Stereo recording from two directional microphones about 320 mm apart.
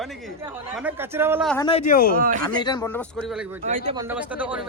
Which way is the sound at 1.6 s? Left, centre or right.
Centre.